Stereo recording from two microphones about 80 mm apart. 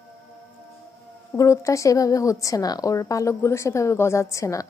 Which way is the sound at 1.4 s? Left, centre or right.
Left.